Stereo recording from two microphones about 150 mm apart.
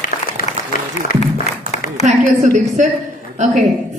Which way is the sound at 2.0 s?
55° right (ahead or behind).